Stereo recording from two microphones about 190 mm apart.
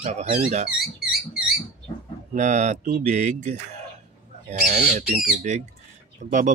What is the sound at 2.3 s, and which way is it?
Speech, 40° right (ahead or behind).